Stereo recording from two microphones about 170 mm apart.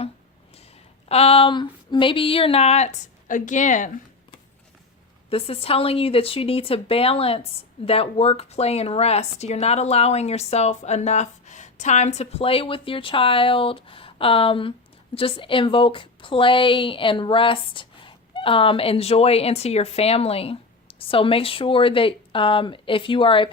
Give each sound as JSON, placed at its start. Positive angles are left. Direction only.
{"t": 1.0, "sound": "speech", "side_deg": 35}
{"t": 5.3, "sound": "speech", "side_deg": 35}